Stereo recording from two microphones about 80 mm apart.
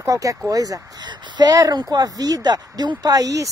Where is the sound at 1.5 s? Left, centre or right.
Right.